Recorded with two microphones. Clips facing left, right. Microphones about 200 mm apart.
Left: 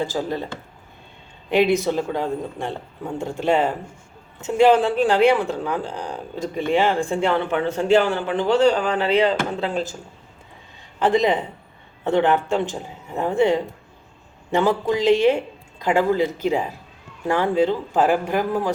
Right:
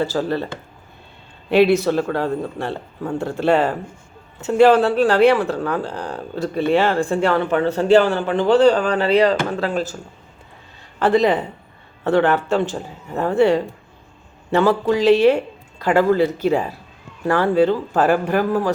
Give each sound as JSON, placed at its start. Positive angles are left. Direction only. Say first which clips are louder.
{"t": 0.0, "sound": "speech", "louder": "right 4 dB", "side_deg": 15}
{"t": 1.5, "sound": "speech", "louder": "right 4 dB", "side_deg": 15}
{"t": 11.0, "sound": "speech", "louder": "right 2 dB", "side_deg": 15}